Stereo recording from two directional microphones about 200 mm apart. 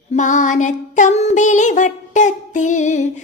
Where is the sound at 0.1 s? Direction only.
40° left (ahead or behind).